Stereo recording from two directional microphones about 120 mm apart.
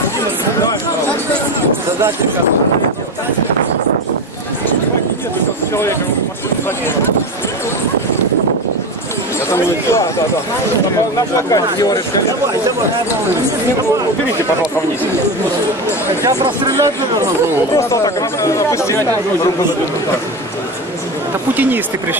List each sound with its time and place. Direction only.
11.1 s speech: 30° left (ahead or behind)
16.2 s speech: 30° right (ahead or behind)
17.7 s speech: 25° left (ahead or behind)
21.5 s speech: 15° right (ahead or behind)